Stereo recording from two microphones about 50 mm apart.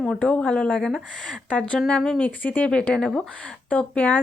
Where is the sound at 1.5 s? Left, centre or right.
Left.